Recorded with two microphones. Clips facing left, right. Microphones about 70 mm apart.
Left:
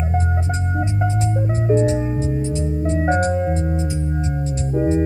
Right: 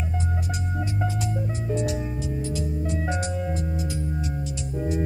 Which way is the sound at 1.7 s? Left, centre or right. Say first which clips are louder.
Left 10 dB; left.